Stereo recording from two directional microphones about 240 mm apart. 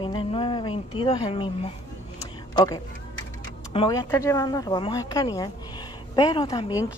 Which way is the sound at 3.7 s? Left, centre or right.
Centre.